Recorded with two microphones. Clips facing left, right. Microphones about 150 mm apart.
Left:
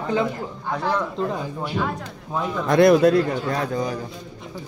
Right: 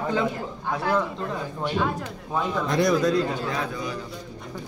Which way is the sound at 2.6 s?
60° left (ahead or behind).